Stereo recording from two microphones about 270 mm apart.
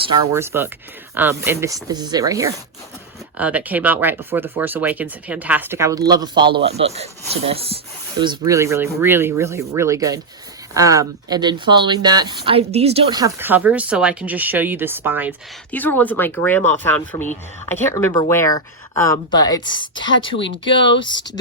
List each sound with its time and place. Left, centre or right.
0.0 s a man's voice: centre
15.7 s speech: centre
17.1 s speech: left
17.7 s speech: centre